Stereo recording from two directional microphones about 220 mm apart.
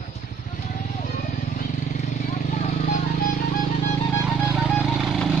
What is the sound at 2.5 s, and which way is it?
Vehicle, 35° left (ahead or behind).